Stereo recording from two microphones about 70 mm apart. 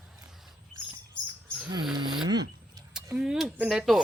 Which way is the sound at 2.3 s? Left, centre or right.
Right.